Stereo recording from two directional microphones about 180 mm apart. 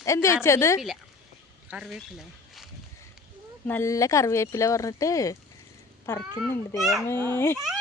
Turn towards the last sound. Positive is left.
turn(degrees=10)  # may be behind; listen again after turning